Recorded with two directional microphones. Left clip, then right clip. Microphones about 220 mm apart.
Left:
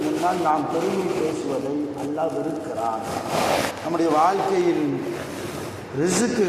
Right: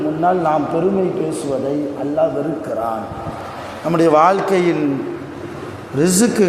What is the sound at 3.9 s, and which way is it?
Speech, 45° right (ahead or behind).